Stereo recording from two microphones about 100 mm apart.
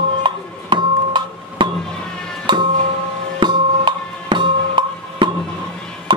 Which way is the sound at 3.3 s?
50° right (ahead or behind).